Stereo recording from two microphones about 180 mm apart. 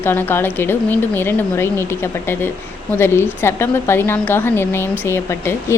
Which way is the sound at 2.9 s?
15° left (ahead or behind).